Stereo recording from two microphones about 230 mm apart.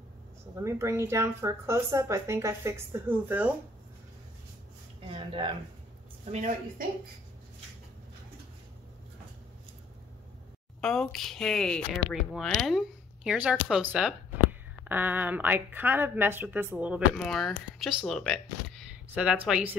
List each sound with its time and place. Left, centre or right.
0.6 s speech: centre
5.0 s a sound: right
6.2 s a woman's voice: right
10.8 s speech: centre